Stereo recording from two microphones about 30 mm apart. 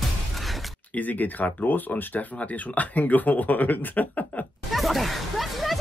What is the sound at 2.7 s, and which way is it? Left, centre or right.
Speech, left.